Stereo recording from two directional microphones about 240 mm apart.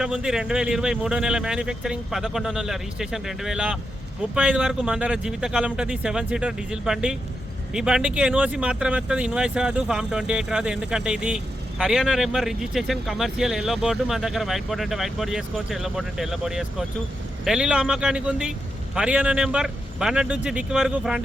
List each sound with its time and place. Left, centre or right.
0.0 s speech: centre